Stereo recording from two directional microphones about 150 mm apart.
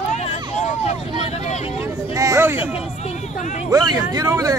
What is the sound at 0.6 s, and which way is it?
Vehicle, 45° left (ahead or behind).